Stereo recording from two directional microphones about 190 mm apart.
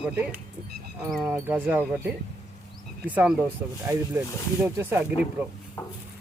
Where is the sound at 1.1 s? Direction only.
5° right (ahead or behind).